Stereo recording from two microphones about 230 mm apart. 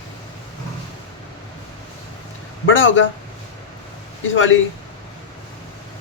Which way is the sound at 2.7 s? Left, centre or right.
Left.